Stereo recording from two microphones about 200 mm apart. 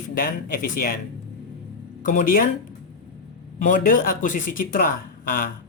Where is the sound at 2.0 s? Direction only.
40° left (ahead or behind).